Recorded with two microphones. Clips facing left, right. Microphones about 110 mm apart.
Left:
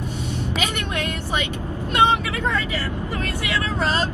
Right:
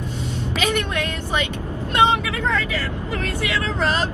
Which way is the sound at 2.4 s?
15° left (ahead or behind).